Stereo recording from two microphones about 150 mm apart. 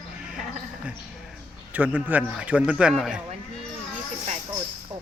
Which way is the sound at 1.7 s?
10° right (ahead or behind).